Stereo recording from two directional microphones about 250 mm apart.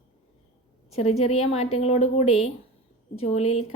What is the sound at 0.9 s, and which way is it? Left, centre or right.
A woman's voice, left.